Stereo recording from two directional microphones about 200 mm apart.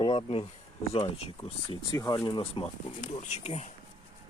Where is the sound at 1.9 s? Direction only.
15° left (ahead or behind); by 3.6 s 35° left (ahead or behind).